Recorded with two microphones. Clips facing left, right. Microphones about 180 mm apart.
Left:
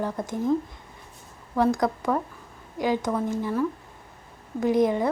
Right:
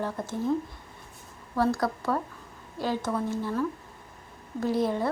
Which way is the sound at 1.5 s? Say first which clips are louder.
Left 3 dB; 15° left (ahead or behind).